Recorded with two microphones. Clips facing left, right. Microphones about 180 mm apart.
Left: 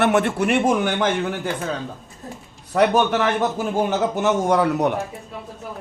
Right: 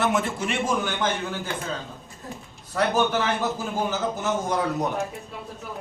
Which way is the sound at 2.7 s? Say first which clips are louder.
Left 5 dB; 70° left (ahead or behind).